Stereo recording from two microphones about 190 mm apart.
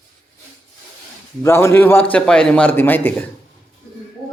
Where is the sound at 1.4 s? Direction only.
15° left (ahead or behind).